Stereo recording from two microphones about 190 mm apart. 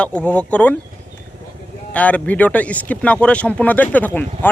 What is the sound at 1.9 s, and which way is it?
Speech, 5° left (ahead or behind).